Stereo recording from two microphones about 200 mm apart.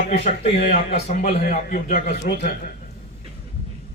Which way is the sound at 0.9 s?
30° left (ahead or behind).